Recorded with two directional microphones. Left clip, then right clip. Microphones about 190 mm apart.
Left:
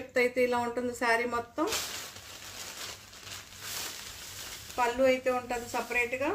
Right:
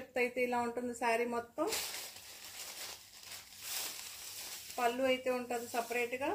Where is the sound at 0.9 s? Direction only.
20° left (ahead or behind).